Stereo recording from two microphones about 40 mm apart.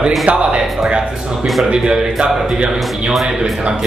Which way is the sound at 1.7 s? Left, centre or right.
Right.